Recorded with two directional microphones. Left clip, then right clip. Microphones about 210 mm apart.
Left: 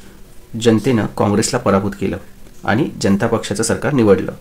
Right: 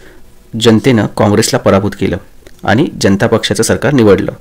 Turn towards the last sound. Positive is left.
turn(degrees=-40)  # may be behind; listen again after turning